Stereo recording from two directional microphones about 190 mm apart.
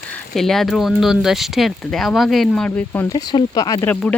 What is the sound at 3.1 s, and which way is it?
Speech, 20° left (ahead or behind).